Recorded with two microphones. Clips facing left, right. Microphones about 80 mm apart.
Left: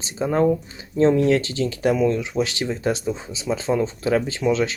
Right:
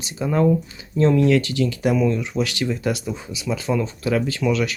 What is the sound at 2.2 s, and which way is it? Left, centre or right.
Speech, left.